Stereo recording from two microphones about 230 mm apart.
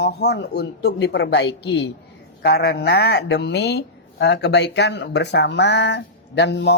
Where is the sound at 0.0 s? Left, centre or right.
Left.